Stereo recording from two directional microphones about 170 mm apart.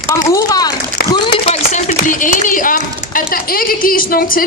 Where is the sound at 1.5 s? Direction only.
45° left (ahead or behind).